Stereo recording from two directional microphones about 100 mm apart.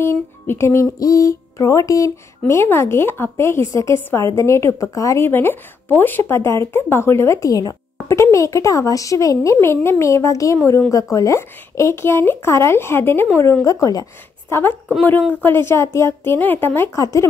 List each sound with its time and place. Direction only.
0.0 s music: 25° left (ahead or behind)
14.5 s music: 25° left (ahead or behind)